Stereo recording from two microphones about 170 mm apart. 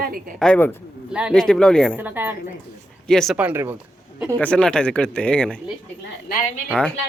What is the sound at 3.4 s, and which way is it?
Speech, 10° right (ahead or behind).